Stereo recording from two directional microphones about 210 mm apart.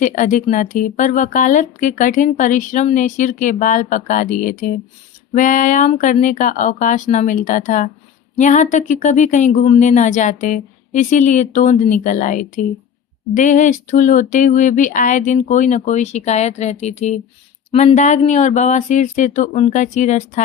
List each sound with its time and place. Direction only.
0.0 s speech: 40° left (ahead or behind)